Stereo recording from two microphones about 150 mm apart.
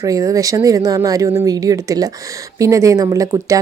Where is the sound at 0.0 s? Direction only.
25° right (ahead or behind).